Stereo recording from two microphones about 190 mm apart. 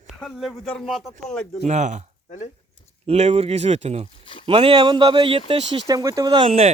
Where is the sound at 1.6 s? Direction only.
40° right (ahead or behind).